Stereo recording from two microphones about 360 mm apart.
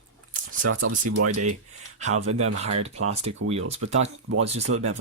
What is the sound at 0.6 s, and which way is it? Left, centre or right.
Speech, right.